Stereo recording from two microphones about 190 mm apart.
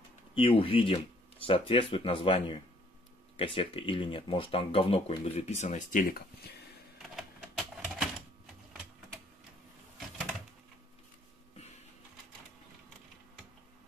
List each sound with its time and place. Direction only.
0.3 s speech: 30° left (ahead or behind); by 6.2 s 45° left (ahead or behind)
7.0 s typing: centre (ahead or behind)